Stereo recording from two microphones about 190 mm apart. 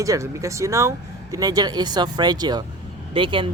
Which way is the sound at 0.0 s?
15° right (ahead or behind).